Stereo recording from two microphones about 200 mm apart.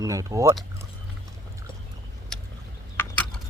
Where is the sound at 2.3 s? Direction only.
5° left (ahead or behind).